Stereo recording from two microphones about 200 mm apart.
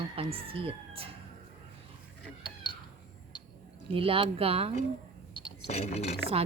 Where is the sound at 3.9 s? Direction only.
25° right (ahead or behind).